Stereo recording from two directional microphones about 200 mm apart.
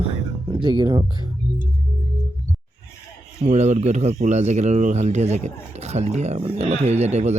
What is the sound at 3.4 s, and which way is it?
Speech, 35° right (ahead or behind).